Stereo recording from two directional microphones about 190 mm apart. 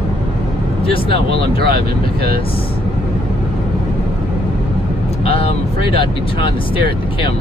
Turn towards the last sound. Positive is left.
turn(degrees=30)  # may be behind; listen again after turning